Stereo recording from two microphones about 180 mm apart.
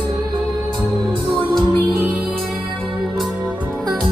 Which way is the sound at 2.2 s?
Centre (ahead or behind).